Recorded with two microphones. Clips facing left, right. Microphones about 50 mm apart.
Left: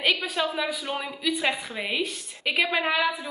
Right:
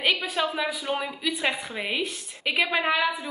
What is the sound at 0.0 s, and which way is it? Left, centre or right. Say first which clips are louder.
A woman's voice: even; centre.